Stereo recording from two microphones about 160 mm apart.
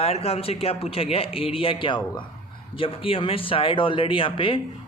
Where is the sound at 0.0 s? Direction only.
40° left (ahead or behind).